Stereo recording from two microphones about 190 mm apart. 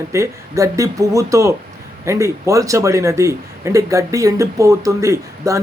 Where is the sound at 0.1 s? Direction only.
15° right (ahead or behind).